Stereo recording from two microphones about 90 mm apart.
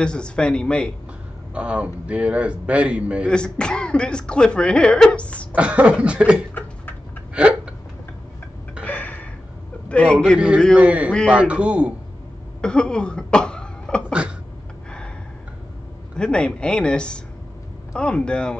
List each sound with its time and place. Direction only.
0.0 s speech: 10° left (ahead or behind)
1.5 s a man's voice: 15° right (ahead or behind)
3.3 s speech: 10° left (ahead or behind)
5.5 s a man's voice: 15° right (ahead or behind)
7.3 s hiccup: 10° right (ahead or behind)
8.8 s a sound: 20° left (ahead or behind)
9.8 s a man's voice: 15° left (ahead or behind)
10.8 s a man's voice: 15° right (ahead or behind)
12.6 s cough: 10° left (ahead or behind)
14.0 s a sound: 10° right (ahead or behind)
16.2 s speech: 10° left (ahead or behind)